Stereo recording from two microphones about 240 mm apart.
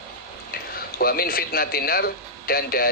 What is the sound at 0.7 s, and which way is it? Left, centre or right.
Speech, left.